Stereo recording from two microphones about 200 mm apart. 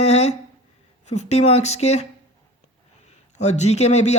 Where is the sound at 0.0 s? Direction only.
35° left (ahead or behind).